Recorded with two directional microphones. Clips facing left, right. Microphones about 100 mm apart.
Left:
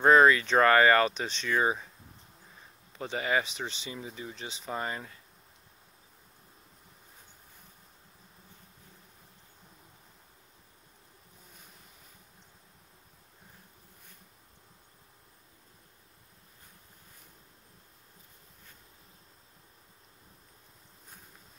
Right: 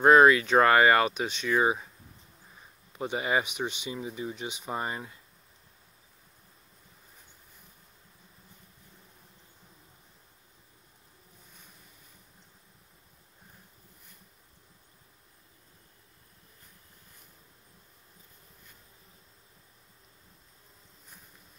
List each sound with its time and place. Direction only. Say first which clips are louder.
0.0 s speech: right 2 dB; 10° right (ahead or behind)
3.0 s speech: right 1 dB; 15° right (ahead or behind)